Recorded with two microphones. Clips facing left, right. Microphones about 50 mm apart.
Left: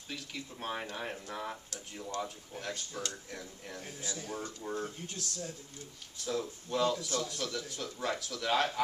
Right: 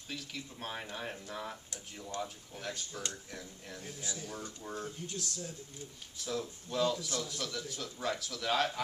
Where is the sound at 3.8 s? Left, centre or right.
Left.